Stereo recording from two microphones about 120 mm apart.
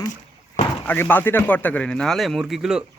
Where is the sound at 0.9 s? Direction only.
15° left (ahead or behind).